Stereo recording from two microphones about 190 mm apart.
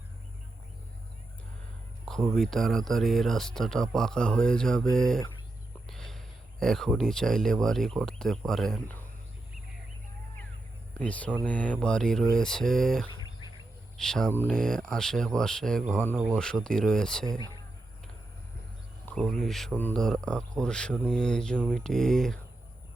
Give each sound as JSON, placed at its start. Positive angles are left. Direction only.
{"t": 2.0, "sound": "speech", "side_deg": 0}
{"t": 10.9, "sound": "speech", "side_deg": 5}
{"t": 13.1, "sound": "bird", "side_deg": 25}
{"t": 13.9, "sound": "speech", "side_deg": 5}
{"t": 19.0, "sound": "speech", "side_deg": 0}